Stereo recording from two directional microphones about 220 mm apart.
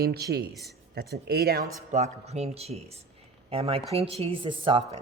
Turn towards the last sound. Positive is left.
turn(degrees=-20)  # may be behind; listen again after turning